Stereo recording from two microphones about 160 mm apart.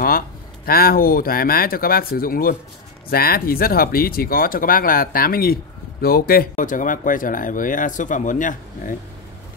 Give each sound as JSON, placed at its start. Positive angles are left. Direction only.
{"t": 0.7, "sound": "speech", "side_deg": 65}